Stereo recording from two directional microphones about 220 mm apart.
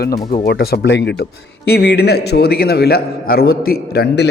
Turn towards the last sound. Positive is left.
turn(degrees=45)  # may be behind; listen again after turning